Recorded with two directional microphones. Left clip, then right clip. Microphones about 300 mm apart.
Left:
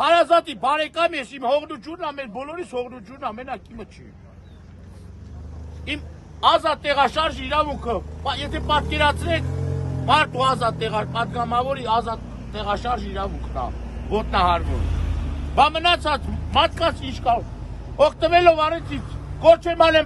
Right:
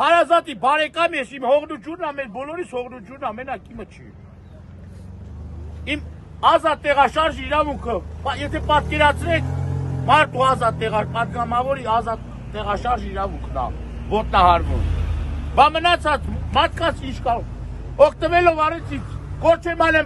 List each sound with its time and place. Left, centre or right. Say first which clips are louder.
0.0 s speech: right 1 dB; centre
6.5 s a man's voice: right 4 dB; centre
14.8 s a man's voice: right 1 dB; left
15.5 s speech: right 2 dB; centre